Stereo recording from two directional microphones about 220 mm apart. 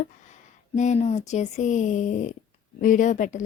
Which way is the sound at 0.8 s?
30° left (ahead or behind).